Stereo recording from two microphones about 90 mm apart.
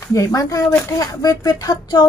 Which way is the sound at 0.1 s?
35° left (ahead or behind).